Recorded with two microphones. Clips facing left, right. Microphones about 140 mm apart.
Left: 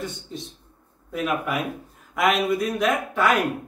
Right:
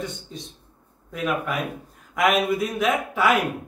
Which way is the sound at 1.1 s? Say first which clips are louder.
Left 1 dB; 5° left (ahead or behind).